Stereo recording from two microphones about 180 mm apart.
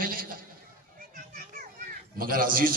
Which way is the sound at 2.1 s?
50° right (ahead or behind).